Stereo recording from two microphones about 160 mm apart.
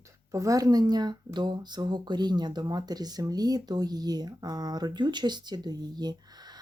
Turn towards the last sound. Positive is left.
turn(degrees=-25)  # may be behind; listen again after turning